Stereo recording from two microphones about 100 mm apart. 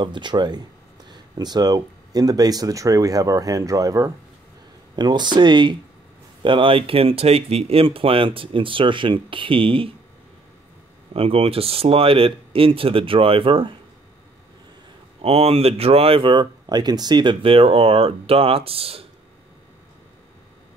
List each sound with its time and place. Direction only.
0.0 s speech: 50° right (ahead or behind); by 4.1 s 35° right (ahead or behind)
4.9 s speech: 45° right (ahead or behind)
11.1 s speech: 70° right (ahead or behind)
15.2 s speech: 80° right; by 16.4 s 60° right (ahead or behind)
16.6 s speech: 45° right (ahead or behind); by 19.0 s 75° right (ahead or behind)